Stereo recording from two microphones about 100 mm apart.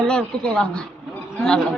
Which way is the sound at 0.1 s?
10° left (ahead or behind).